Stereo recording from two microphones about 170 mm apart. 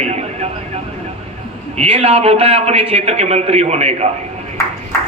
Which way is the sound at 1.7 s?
35° right (ahead or behind).